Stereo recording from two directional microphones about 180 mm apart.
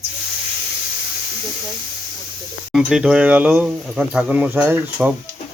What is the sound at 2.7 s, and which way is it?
Speech, 5° right (ahead or behind).